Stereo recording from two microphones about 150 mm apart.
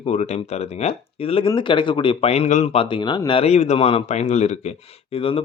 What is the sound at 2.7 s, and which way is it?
Speech, 35° left (ahead or behind).